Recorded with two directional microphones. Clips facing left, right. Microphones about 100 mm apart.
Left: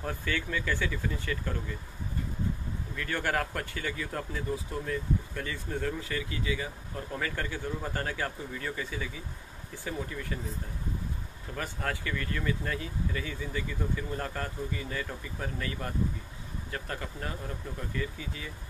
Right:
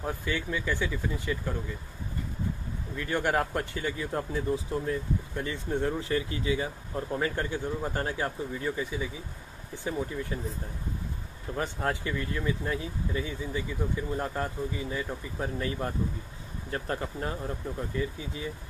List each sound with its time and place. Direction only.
0.0 s speech: 15° right (ahead or behind)
3.0 s speech: 20° right (ahead or behind)
11.5 s speech: 25° right (ahead or behind)